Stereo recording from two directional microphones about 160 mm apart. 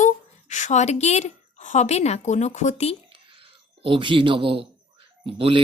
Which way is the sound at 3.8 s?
30° right (ahead or behind).